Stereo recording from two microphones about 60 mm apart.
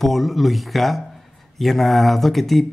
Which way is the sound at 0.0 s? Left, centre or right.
Centre.